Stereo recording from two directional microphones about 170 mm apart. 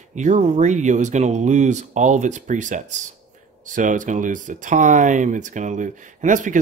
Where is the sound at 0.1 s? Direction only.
45° right (ahead or behind).